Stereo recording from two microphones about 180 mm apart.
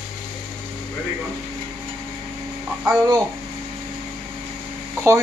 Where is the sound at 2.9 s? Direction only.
20° right (ahead or behind).